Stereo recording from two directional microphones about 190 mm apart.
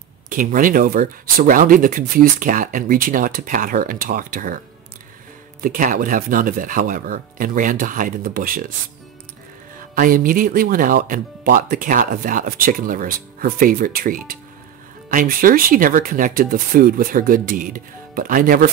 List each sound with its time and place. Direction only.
0.3 s speech: 45° right (ahead or behind)
5.6 s speech: 45° right (ahead or behind)
9.9 s speech: 50° right (ahead or behind)